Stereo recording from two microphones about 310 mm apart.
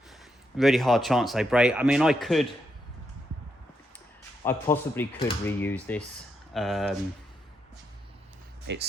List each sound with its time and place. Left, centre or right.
0.5 s speech: centre
4.4 s speech: centre
8.6 s speech: right